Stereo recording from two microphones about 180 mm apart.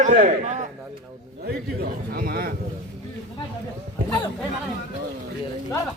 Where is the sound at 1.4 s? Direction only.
55° right (ahead or behind).